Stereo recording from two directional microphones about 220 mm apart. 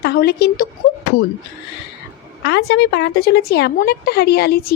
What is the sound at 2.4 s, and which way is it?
A woman's voice, 50° left (ahead or behind).